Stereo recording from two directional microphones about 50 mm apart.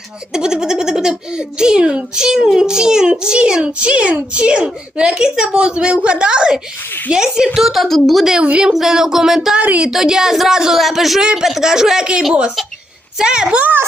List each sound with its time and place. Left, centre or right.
0.3 s a child's voice: centre
7.6 s a woman's voice: centre
8.4 s a woman's voice: right
8.7 s a child's voice: centre
9.6 s speech: right
9.9 s a child's voice: centre
11.2 s a woman's voice: centre
11.4 s a child's voice: centre